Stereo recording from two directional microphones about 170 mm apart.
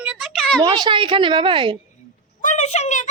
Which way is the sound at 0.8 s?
30° right (ahead or behind).